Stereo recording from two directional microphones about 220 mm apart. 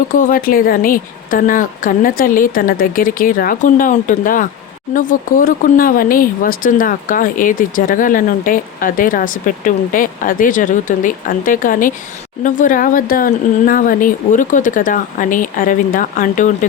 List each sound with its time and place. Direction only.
0.1 s speech: 40° left (ahead or behind)